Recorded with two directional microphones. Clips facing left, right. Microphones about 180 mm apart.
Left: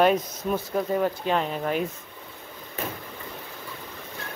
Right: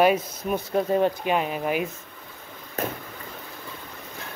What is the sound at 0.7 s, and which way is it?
Speech, 25° right (ahead or behind).